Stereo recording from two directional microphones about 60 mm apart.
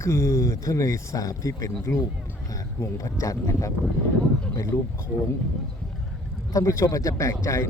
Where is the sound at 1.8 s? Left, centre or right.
Left.